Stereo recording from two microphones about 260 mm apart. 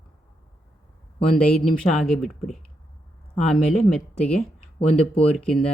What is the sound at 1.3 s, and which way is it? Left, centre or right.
Speech, centre.